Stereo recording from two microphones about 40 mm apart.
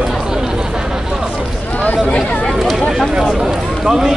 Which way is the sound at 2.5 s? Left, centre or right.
Centre.